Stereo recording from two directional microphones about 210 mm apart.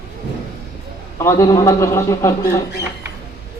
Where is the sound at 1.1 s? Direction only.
15° left (ahead or behind).